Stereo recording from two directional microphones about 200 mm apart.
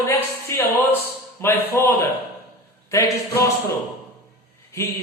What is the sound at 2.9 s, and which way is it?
Speech, 15° left (ahead or behind).